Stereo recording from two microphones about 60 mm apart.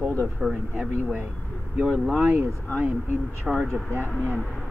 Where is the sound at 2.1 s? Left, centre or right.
Right.